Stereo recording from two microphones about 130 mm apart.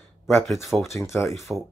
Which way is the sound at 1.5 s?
15° right (ahead or behind).